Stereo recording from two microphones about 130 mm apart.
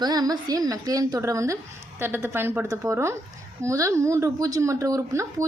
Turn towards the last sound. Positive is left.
turn(degrees=-25)  # may be behind; listen again after turning